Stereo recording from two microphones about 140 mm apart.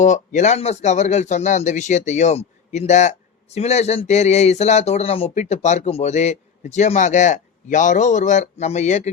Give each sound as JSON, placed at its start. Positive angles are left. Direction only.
{"t": 0.0, "sound": "speech", "side_deg": 60}